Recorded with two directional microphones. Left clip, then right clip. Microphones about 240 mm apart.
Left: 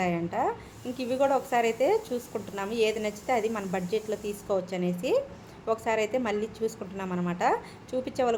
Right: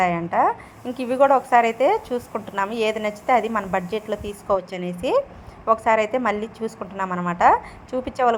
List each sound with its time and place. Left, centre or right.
0.0 s a woman's voice: centre